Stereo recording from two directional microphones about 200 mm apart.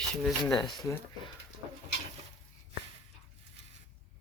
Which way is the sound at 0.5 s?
20° left (ahead or behind).